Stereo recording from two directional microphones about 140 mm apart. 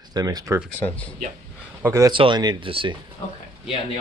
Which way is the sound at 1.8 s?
20° right (ahead or behind).